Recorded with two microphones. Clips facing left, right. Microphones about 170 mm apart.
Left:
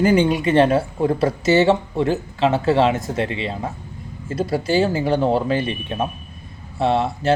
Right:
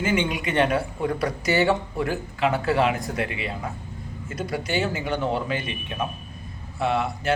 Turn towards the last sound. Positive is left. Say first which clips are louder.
# left 5 dB
turn(degrees=30)  # may be behind; listen again after turning